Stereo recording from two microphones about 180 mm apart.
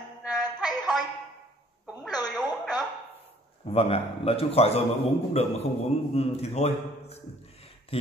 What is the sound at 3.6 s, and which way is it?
A man's voice, 30° left (ahead or behind).